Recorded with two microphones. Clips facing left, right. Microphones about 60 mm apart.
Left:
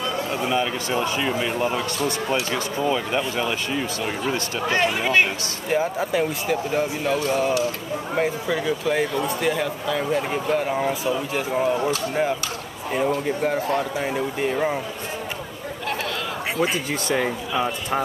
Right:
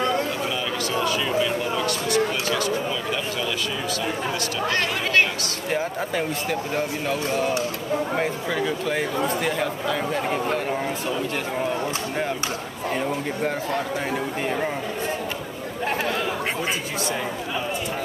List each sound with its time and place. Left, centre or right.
0.5 s a sound: left
1.9 s speech: left
4.6 s speech: centre
5.7 s speech: centre
8.2 s speech: centre